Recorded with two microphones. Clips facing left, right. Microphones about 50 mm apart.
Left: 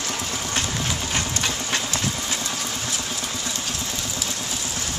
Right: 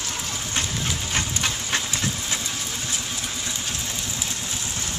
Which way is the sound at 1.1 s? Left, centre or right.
Centre.